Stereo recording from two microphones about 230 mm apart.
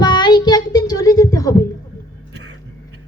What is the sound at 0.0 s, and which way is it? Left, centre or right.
Child singing, centre.